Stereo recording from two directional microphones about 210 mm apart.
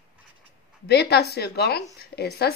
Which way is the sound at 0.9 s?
50° left (ahead or behind).